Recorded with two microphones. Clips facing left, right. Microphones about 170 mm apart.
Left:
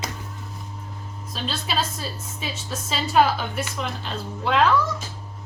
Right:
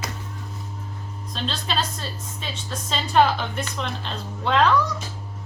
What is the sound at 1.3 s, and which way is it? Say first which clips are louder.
A woman's voice: even; 5° left (ahead or behind).